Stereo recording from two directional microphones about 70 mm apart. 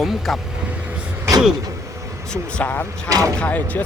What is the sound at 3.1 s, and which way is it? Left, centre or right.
Speech, right.